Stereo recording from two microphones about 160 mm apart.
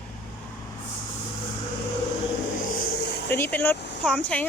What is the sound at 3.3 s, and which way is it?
Speech, 15° left (ahead or behind).